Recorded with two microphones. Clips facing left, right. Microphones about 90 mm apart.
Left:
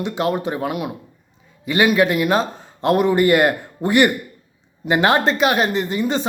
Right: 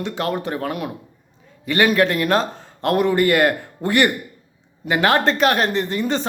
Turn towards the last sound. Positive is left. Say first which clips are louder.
# left 1 dB
turn(degrees=15)  # may be behind; listen again after turning